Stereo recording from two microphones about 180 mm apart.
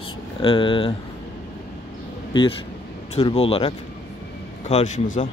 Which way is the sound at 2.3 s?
25° left (ahead or behind).